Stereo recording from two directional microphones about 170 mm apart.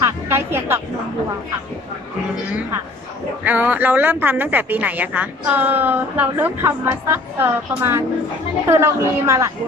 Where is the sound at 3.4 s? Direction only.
10° right (ahead or behind).